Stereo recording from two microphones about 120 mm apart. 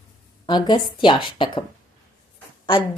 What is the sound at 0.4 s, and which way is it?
A woman's voice, 35° left (ahead or behind).